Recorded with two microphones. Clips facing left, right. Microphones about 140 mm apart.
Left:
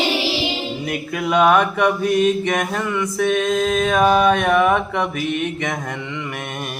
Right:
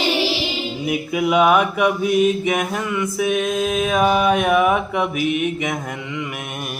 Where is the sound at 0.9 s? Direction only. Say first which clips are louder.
Right 3 dB; 10° right (ahead or behind).